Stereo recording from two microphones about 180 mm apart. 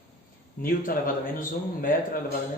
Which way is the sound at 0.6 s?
50° left (ahead or behind).